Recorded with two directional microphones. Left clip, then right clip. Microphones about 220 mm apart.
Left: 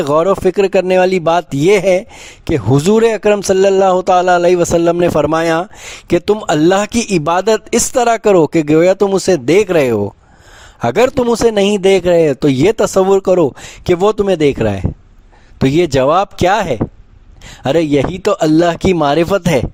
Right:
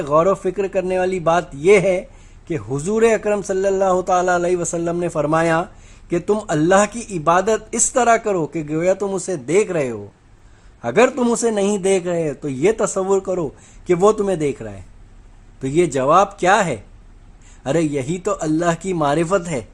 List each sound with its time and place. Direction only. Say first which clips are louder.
0.0 s speech: left 5 dB; 50° left (ahead or behind)